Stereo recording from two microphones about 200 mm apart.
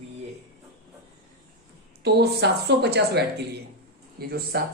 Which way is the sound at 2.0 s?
55° right (ahead or behind).